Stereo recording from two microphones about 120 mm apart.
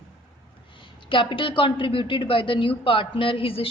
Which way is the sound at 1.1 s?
45° left (ahead or behind).